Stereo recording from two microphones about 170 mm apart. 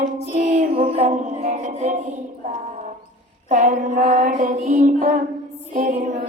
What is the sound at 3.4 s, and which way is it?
A woman's voice, 50° right (ahead or behind).